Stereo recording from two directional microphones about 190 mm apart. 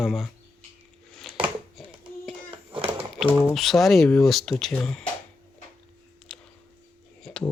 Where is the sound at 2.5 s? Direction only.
30° right (ahead or behind).